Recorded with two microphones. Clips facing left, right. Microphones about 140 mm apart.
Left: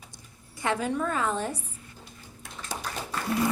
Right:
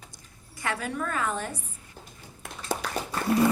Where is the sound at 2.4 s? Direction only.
60° right (ahead or behind).